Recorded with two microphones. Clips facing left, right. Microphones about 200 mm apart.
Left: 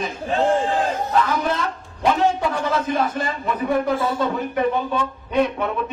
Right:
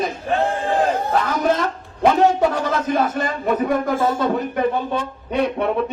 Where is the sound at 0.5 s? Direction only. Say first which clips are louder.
Right 2 dB; 60° right (ahead or behind).